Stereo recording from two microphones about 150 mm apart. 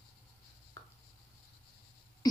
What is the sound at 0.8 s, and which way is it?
Writing, 20° left (ahead or behind).